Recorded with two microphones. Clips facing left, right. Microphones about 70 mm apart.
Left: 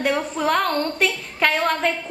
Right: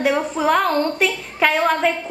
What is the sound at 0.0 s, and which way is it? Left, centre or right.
A woman's voice, centre.